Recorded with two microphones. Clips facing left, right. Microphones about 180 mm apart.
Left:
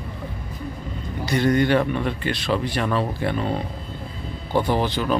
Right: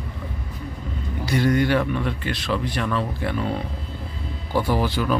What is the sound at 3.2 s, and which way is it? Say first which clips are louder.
Speech: left 1 dB; centre (ahead or behind).